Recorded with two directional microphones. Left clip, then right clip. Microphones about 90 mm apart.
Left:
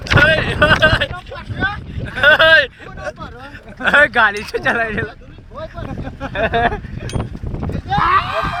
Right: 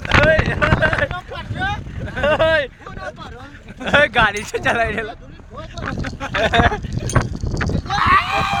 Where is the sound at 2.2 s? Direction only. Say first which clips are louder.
Left 6 dB; 90° left.